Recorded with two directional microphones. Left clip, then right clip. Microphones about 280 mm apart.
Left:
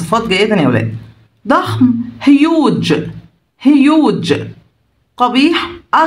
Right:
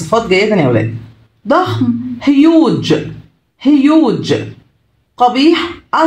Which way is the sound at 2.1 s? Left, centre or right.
Left.